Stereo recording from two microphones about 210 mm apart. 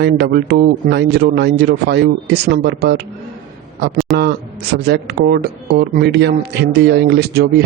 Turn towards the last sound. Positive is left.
turn(degrees=-50)  # may be behind; listen again after turning